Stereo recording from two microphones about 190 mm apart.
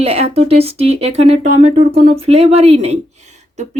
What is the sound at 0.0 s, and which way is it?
Speech, 35° right (ahead or behind).